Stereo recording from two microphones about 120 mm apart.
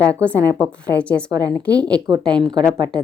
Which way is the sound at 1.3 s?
30° right (ahead or behind).